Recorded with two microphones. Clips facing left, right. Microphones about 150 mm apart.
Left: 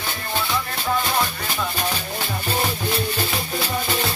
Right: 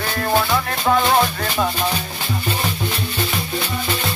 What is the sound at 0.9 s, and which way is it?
Music, 60° right (ahead or behind).